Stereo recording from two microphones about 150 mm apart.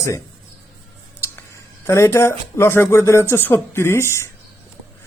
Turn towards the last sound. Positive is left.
turn(degrees=15)  # may be behind; listen again after turning